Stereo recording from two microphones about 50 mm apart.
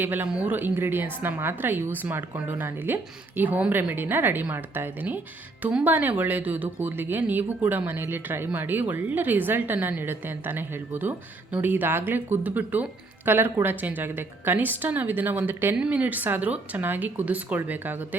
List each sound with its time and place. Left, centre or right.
0.0 s speech: right
12.4 s speech: right
15.8 s speech: right